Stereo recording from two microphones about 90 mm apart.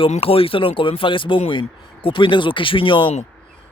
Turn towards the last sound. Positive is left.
turn(degrees=70)  # may be behind; listen again after turning